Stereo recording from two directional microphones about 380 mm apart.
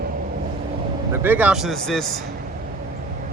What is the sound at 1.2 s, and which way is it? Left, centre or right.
Speech, centre.